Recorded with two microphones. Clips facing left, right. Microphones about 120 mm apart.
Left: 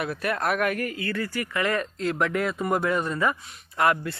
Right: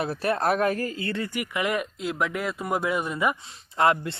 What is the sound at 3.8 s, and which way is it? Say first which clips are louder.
Speech: right 1 dB; 25° right (ahead or behind).